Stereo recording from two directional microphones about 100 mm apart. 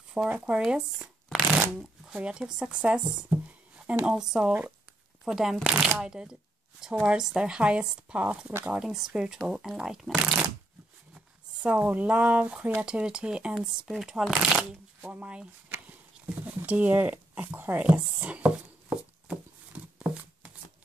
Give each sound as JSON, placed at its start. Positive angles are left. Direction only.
{"t": 0.2, "sound": "speech", "side_deg": -20}
{"t": 0.6, "sound": "speech", "side_deg": -5}
{"t": 11.6, "sound": "speech", "side_deg": -15}
{"t": 15.0, "sound": "a sound", "side_deg": -15}
{"t": 16.6, "sound": "speech", "side_deg": -15}